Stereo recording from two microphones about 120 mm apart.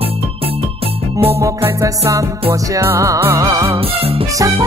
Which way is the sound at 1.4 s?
25° right (ahead or behind).